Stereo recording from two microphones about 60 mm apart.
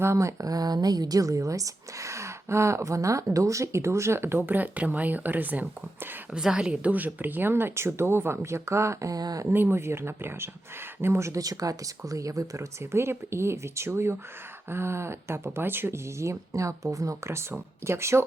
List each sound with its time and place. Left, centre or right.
0.0 s a woman's voice: right
6.3 s speech: centre; by 9.5 s right
9.5 s speech: right
11.3 s speech: right
12.8 s speech: right
16.1 s a woman's voice: right